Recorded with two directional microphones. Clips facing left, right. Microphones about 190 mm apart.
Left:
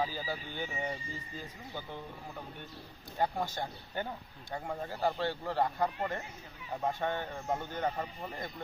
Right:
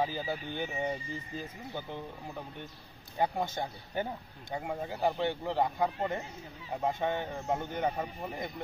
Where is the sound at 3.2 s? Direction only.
20° right (ahead or behind).